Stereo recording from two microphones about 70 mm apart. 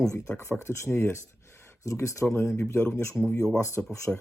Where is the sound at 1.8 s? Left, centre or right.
Left.